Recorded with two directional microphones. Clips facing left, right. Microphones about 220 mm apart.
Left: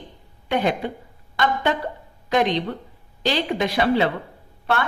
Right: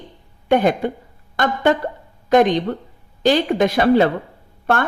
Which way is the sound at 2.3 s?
50° right (ahead or behind).